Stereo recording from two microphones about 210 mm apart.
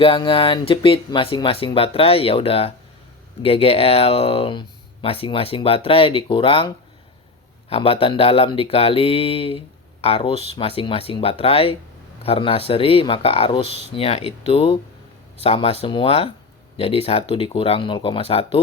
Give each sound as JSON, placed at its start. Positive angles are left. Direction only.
{"t": 0.0, "sound": "speech", "side_deg": 25}